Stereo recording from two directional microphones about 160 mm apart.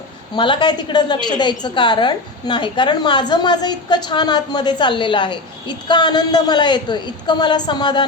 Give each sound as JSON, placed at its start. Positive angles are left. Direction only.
{"t": 0.3, "sound": "a woman's voice", "side_deg": 30}